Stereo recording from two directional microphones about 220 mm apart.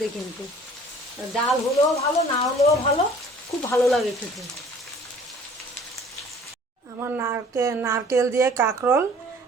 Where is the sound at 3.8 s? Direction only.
Centre (ahead or behind).